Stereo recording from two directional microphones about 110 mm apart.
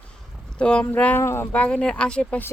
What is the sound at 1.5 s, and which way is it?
Speech, 10° left (ahead or behind).